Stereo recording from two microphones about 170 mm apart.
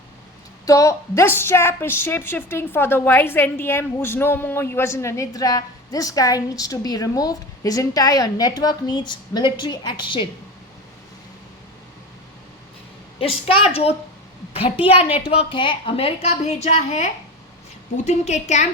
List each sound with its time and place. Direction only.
0.6 s a woman's voice: 20° left (ahead or behind)
13.1 s a woman's voice: 35° left (ahead or behind)